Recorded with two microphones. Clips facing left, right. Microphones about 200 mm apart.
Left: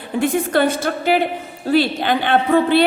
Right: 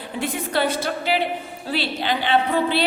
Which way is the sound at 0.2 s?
50° left (ahead or behind).